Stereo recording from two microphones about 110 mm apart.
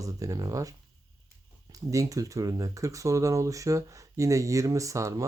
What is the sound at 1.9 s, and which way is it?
Speech, 30° right (ahead or behind).